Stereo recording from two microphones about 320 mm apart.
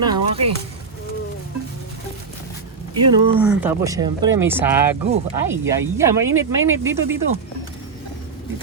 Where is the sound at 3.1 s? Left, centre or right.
Centre.